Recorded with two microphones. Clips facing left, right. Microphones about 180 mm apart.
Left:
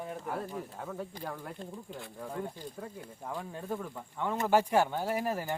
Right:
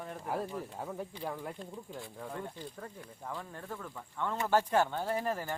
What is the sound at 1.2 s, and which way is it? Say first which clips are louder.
Speech: right 1 dB; 5° right (ahead or behind).